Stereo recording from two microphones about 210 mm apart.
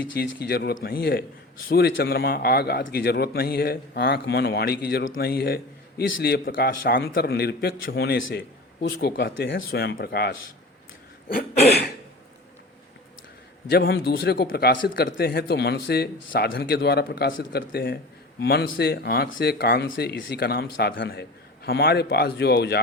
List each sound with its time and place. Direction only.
0.2 s speech: 45° left (ahead or behind)
13.7 s speech: 50° left (ahead or behind)
17.7 s speech: 45° left (ahead or behind)